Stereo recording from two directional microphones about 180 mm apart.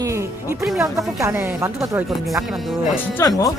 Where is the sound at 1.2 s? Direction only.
10° right (ahead or behind).